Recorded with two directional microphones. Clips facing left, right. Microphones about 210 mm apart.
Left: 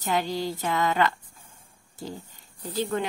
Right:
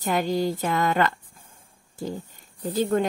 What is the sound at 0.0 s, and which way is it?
A woman's voice, 50° right (ahead or behind).